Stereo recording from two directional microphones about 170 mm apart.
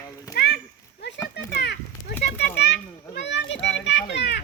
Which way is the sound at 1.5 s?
80° left.